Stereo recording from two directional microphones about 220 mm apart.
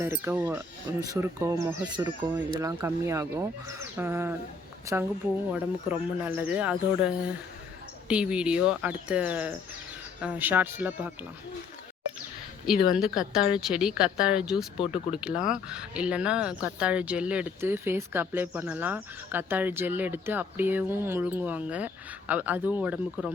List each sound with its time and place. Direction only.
0.0 s a woman's voice: 10° right (ahead or behind)
12.6 s a woman's voice: centre (ahead or behind)